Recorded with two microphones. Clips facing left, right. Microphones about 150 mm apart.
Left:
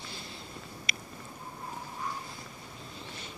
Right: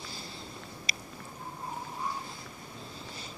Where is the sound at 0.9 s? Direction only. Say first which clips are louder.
Left 1 dB; 35° right (ahead or behind).